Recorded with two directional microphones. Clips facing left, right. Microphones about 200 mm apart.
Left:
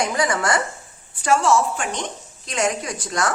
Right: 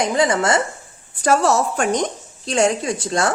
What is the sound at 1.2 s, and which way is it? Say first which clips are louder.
Speech: right 1 dB; 40° right (ahead or behind).